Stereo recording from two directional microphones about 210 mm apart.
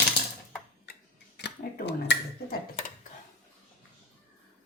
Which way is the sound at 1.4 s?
55° left (ahead or behind).